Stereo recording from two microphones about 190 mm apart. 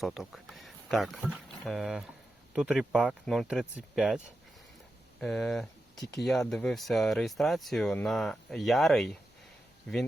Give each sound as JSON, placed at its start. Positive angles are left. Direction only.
{"t": 0.0, "sound": "speech", "side_deg": 0}
{"t": 5.2, "sound": "speech", "side_deg": 5}